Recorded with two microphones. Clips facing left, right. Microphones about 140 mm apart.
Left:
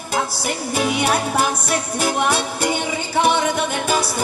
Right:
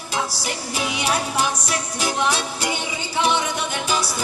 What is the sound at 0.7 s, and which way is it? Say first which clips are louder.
Music: left 5 dB; 50° left (ahead or behind).